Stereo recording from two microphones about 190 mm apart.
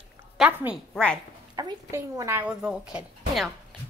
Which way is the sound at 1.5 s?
20° right (ahead or behind).